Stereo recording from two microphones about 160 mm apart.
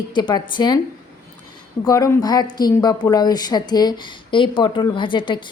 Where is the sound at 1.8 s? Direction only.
20° left (ahead or behind).